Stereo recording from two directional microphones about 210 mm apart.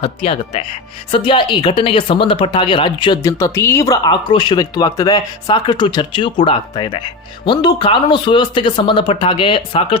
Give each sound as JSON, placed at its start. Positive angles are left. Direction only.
{"t": 0.0, "sound": "a woman's voice", "side_deg": 30}